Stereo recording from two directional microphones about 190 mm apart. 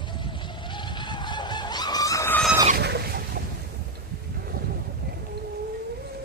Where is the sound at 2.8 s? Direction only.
55° right (ahead or behind).